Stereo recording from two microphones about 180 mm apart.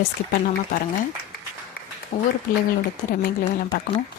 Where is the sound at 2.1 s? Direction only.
35° left (ahead or behind).